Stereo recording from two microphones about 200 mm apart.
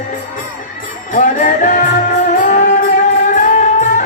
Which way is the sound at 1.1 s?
40° left (ahead or behind).